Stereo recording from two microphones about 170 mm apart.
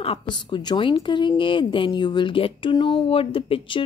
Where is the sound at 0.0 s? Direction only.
30° left (ahead or behind).